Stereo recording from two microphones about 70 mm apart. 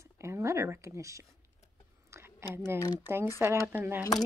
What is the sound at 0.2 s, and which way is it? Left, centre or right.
Speech, right.